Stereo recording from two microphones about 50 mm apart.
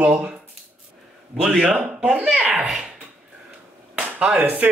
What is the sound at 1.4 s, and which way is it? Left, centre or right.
Speech, centre.